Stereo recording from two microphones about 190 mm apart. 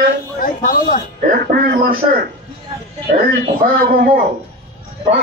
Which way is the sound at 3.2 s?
55° right (ahead or behind).